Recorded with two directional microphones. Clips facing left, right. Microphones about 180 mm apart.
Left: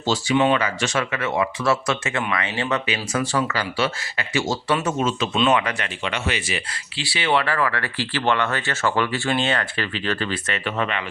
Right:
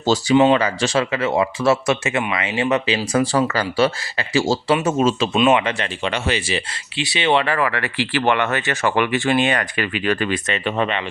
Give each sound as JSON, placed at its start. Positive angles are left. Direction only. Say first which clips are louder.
{"t": 0.0, "sound": "speech", "louder": "right 5 dB", "side_deg": -40}
{"t": 0.3, "sound": "speech", "louder": "right 5 dB", "side_deg": -30}
{"t": 5.3, "sound": "speech", "louder": "right 4 dB", "side_deg": -15}
{"t": 6.9, "sound": "speech", "louder": "right 4 dB", "side_deg": -20}